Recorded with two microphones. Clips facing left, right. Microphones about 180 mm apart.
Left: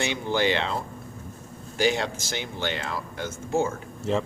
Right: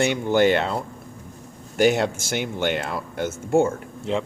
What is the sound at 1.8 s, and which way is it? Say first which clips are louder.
Speech: right 6 dB; 55° right (ahead or behind).